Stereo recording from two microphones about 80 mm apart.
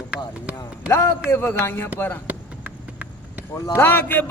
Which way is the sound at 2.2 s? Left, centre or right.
Centre.